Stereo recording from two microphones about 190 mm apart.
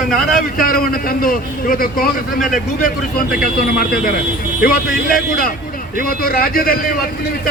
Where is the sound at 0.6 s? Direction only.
50° left (ahead or behind).